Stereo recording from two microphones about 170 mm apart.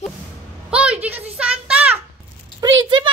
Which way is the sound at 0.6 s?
5° right (ahead or behind).